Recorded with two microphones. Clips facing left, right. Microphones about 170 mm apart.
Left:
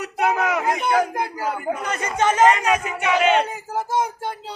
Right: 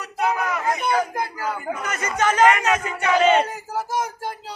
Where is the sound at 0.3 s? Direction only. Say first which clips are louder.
Left 4 dB; 75° left (ahead or behind).